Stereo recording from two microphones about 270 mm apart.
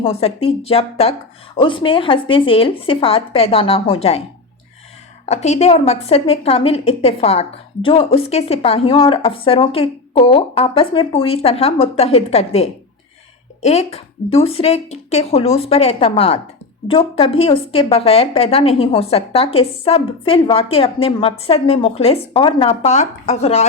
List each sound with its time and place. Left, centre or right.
0.0 s a woman's voice: left
5.2 s a woman's voice: left